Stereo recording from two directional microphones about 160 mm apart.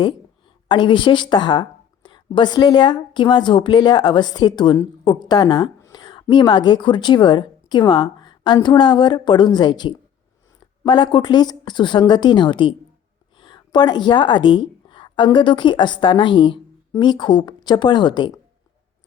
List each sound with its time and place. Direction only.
0.7 s a woman's voice: 30° left (ahead or behind)